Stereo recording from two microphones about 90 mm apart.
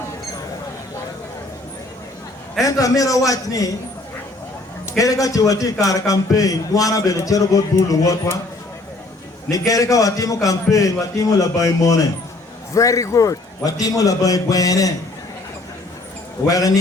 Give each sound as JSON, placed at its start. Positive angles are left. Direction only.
{"t": 2.6, "sound": "a man's voice", "side_deg": 40}
{"t": 4.9, "sound": "a man's voice", "side_deg": 40}
{"t": 9.5, "sound": "a man's voice", "side_deg": 40}
{"t": 16.5, "sound": "a man's voice", "side_deg": 40}